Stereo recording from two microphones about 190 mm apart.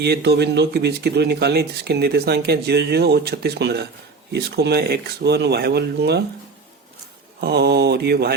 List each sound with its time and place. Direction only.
0.0 s speech: 60° right (ahead or behind)
7.4 s speech: 60° right (ahead or behind)